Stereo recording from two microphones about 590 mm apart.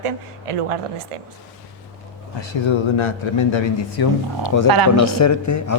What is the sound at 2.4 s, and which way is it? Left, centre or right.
A man's voice, left.